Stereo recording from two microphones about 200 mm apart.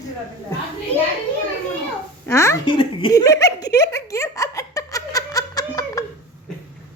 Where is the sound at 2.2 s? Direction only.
15° left (ahead or behind).